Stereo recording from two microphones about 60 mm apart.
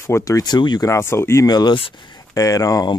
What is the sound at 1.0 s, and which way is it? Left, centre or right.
Speech, left.